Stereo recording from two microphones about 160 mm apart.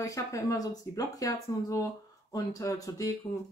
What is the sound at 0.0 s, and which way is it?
Speech, 20° left (ahead or behind).